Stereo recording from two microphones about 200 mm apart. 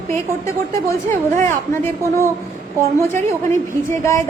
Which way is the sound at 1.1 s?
40° right (ahead or behind).